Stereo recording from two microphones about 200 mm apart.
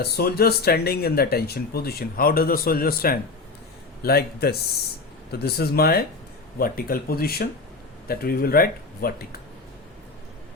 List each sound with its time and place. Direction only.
0.0 s speech: 50° left (ahead or behind)